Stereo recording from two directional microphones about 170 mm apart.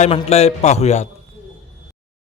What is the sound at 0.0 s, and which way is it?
A man's voice, 40° left (ahead or behind).